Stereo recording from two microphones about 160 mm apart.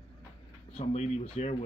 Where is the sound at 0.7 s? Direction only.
45° left (ahead or behind).